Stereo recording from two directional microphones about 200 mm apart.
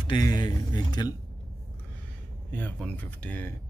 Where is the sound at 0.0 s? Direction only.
20° left (ahead or behind).